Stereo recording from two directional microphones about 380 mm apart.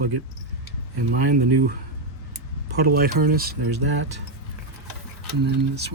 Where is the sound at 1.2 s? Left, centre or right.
Right.